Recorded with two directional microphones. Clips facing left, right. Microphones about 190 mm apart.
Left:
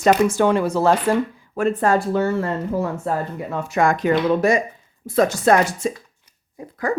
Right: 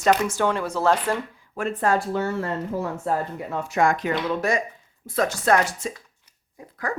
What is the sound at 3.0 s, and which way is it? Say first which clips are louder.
Speech: left 2 dB; 90° left.